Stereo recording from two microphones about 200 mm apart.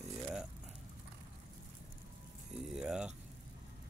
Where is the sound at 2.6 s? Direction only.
5° right (ahead or behind).